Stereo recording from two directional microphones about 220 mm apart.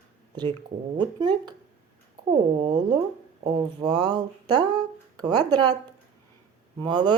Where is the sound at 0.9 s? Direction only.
20° right (ahead or behind).